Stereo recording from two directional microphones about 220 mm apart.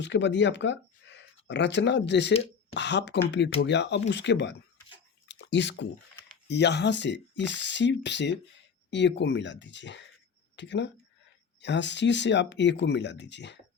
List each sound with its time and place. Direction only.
0.0 s speech: 55° left (ahead or behind)
5.3 s a sound: 55° left (ahead or behind)
6.5 s speech: 50° left (ahead or behind)